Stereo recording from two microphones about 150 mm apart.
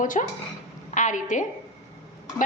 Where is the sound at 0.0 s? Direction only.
60° left (ahead or behind).